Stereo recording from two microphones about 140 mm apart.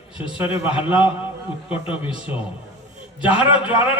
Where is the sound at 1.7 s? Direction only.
40° left (ahead or behind).